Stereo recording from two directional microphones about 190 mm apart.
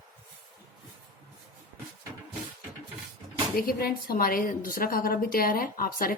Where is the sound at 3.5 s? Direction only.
50° left (ahead or behind).